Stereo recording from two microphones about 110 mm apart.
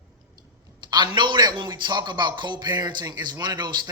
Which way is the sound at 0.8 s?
40° right (ahead or behind).